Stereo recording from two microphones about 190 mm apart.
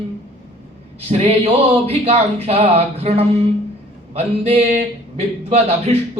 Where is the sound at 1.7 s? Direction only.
35° right (ahead or behind).